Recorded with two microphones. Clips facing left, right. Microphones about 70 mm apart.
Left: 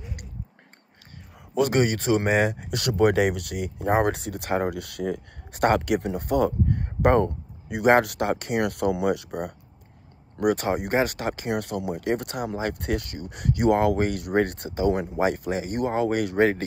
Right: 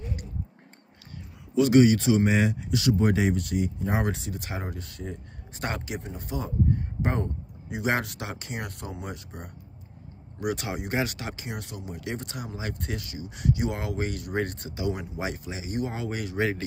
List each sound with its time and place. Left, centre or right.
1.5 s speech: left
5.8 s speech: left
10.3 s speech: left